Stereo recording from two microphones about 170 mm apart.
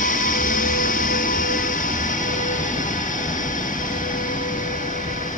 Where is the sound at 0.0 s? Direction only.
50° left (ahead or behind).